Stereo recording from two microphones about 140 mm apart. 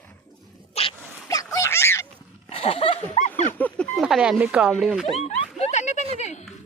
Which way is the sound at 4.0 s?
5° right (ahead or behind).